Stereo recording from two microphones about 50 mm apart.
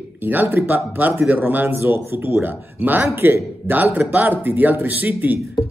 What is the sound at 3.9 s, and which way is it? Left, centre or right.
Speech, right.